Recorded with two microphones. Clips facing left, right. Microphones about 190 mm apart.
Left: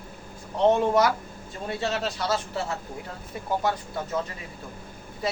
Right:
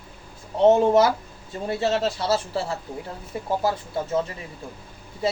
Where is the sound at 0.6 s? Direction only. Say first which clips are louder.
Right 4 dB; 25° right (ahead or behind).